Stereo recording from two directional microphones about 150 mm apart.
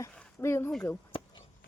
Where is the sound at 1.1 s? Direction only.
35° left (ahead or behind).